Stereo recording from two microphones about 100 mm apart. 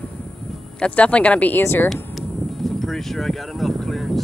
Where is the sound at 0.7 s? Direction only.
10° left (ahead or behind).